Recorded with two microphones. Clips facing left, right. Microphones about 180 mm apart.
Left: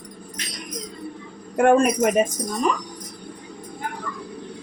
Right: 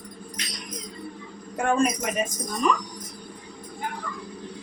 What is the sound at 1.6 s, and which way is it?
Speech, 60° left (ahead or behind).